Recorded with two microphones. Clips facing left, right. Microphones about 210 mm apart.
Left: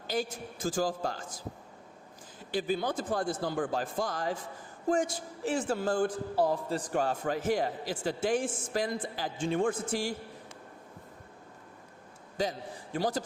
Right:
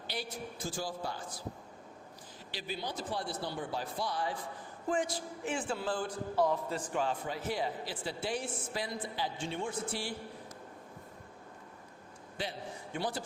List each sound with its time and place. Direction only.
0.1 s a man's voice: 45° left (ahead or behind)
0.6 s a man's voice: 90° left
1.0 s a man's voice: 45° left (ahead or behind)
2.5 s a man's voice: 50° left (ahead or behind)
6.3 s a man's voice: 35° left (ahead or behind)
12.4 s a man's voice: 40° left (ahead or behind)